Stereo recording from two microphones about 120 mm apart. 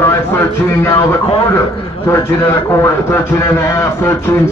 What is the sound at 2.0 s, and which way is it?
A man's voice, 25° left (ahead or behind).